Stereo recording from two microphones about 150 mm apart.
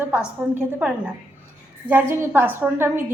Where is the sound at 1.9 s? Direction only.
15° right (ahead or behind).